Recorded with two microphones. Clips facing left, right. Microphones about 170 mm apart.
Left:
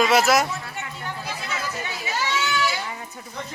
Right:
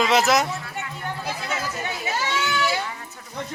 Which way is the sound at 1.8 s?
55° right (ahead or behind).